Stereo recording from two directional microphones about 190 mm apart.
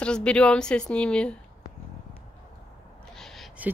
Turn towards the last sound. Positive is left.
turn(degrees=0)  # may be behind; listen again after turning